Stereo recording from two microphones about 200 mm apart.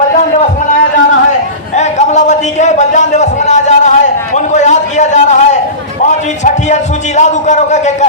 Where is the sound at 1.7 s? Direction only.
35° left (ahead or behind).